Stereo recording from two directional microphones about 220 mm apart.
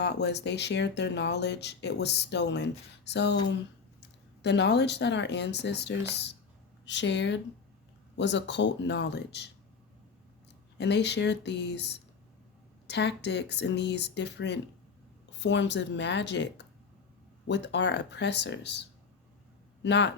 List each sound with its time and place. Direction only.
0.0 s speech: 50° left (ahead or behind)
10.8 s speech: 50° left (ahead or behind)